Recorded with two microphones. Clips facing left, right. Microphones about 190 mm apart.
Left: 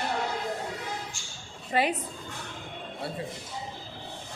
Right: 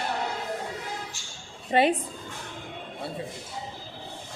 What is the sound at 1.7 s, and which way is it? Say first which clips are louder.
Speech: right 5 dB; 25° right (ahead or behind).